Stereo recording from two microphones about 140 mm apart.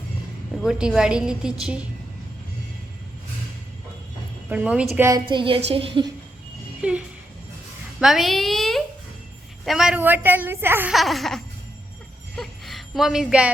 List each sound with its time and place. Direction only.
0.6 s a woman's voice: 5° right (ahead or behind)
4.4 s a woman's voice: 10° right (ahead or behind)
5.3 s a woman's voice: 40° right (ahead or behind)
6.8 s a woman's voice: 10° right (ahead or behind)
10.0 s a woman's voice: 15° right (ahead or behind)
10.9 s a woman's voice: centre (ahead or behind)
12.4 s music: centre (ahead or behind)